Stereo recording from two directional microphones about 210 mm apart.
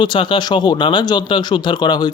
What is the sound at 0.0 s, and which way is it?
Speech, 20° left (ahead or behind).